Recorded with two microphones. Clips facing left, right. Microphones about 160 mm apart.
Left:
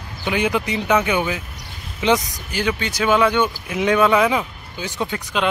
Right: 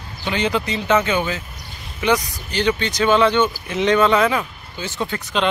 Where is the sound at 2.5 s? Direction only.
10° left (ahead or behind).